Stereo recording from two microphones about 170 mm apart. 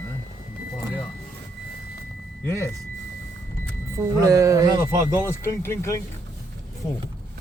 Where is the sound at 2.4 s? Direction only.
15° left (ahead or behind).